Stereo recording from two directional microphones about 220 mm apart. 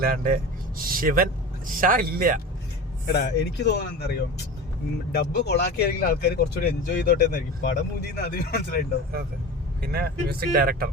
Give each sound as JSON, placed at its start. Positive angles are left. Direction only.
{"t": 0.0, "sound": "speech", "side_deg": -40}
{"t": 3.1, "sound": "speech", "side_deg": 50}
{"t": 5.1, "sound": "speech", "side_deg": 50}
{"t": 9.8, "sound": "speech", "side_deg": -45}